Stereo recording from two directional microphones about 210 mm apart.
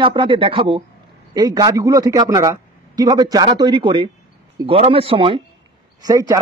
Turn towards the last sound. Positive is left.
turn(degrees=-15)  # may be behind; listen again after turning